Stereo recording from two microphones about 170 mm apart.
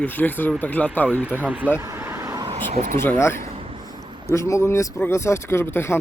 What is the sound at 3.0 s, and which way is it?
Speech, 15° left (ahead or behind).